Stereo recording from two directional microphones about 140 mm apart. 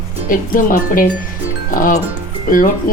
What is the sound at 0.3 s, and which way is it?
Speech, 80° left.